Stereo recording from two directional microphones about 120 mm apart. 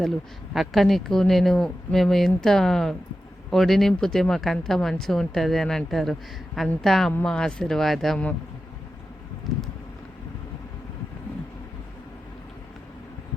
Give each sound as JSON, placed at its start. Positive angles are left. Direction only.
{"t": 0.5, "sound": "speech", "side_deg": 0}